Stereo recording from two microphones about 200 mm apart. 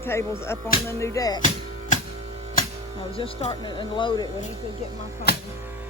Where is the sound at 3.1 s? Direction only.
30° left (ahead or behind).